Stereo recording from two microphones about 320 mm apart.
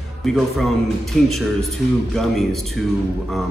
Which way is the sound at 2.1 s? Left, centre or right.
Centre.